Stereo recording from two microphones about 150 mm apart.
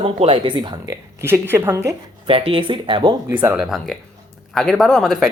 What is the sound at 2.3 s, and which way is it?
Speech, 35° right (ahead or behind).